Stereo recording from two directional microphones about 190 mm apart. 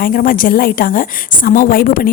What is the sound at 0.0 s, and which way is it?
A woman's voice, 50° left (ahead or behind).